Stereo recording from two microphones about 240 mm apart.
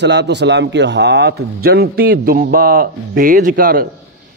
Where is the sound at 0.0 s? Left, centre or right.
Right.